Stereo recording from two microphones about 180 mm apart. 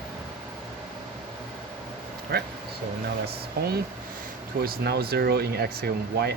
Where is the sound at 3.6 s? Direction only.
60° right (ahead or behind).